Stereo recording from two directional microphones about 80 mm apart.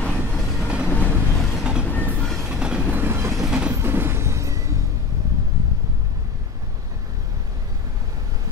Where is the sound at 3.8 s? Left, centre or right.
Right.